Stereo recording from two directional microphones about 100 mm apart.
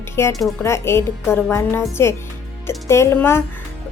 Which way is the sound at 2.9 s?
25° left (ahead or behind).